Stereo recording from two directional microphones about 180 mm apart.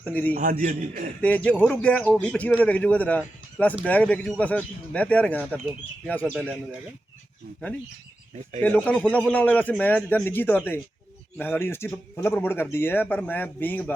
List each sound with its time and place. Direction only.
0.0 s a man's voice: 10° left (ahead or behind)
0.3 s a man's voice: 50° right (ahead or behind)
1.6 s a man's voice: 5° left (ahead or behind)
8.6 s a man's voice: 10° left (ahead or behind)